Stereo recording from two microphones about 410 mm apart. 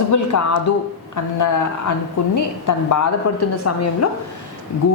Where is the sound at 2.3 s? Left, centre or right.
Left.